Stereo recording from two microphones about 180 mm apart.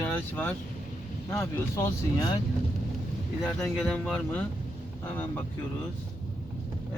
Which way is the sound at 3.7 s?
5° left (ahead or behind).